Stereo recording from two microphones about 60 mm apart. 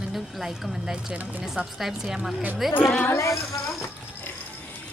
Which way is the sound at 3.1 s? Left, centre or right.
Left.